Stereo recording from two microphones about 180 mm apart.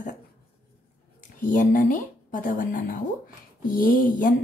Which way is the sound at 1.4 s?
50° left (ahead or behind).